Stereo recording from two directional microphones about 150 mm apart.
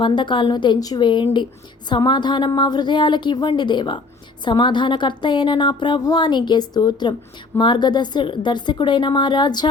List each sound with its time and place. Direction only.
0.0 s speech: 30° left (ahead or behind)